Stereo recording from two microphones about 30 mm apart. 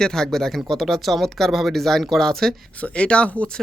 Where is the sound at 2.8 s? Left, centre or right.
Left.